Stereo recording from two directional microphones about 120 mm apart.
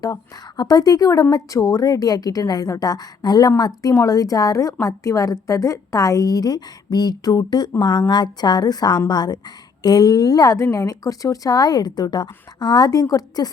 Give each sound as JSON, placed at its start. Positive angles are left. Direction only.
{"t": 0.0, "sound": "a woman's voice", "side_deg": 35}